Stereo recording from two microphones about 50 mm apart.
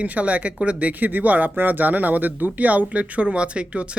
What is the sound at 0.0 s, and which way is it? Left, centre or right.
A man's voice, right.